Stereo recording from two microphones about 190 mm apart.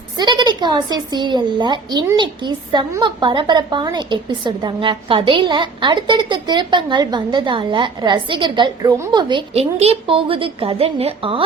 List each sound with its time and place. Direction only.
0.2 s a woman's voice: 25° right (ahead or behind)